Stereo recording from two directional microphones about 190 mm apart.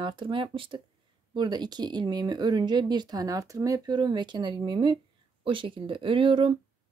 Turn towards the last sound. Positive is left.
turn(degrees=-25)  # may be behind; listen again after turning